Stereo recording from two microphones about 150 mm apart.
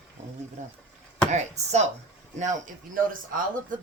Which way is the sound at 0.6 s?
55° right (ahead or behind).